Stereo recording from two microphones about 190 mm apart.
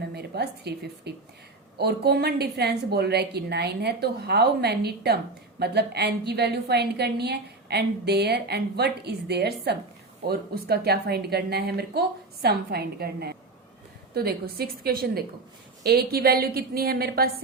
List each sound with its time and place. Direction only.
0.1 s a woman's voice: 60° right (ahead or behind)